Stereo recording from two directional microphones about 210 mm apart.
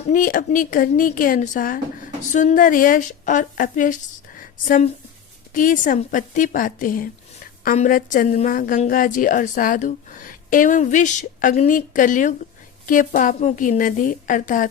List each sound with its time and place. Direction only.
0.0 s a woman's voice: 40° left (ahead or behind)